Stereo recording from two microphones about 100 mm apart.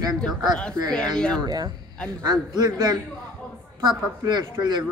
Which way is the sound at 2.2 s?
40° right (ahead or behind).